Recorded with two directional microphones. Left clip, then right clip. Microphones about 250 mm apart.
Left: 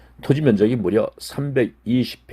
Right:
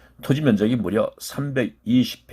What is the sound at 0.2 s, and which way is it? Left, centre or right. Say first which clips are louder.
Speech: left 3 dB; centre.